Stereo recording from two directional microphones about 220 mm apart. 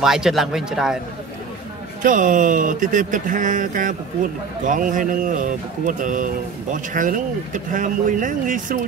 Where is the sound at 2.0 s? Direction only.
35° right (ahead or behind).